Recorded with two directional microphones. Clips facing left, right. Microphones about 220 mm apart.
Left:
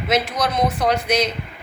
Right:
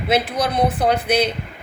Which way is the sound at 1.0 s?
55° right (ahead or behind).